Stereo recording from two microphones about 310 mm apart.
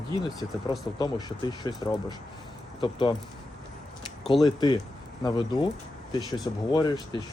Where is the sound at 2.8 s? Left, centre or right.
Centre.